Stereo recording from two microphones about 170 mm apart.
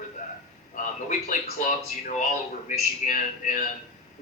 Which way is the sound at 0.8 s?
50° left (ahead or behind).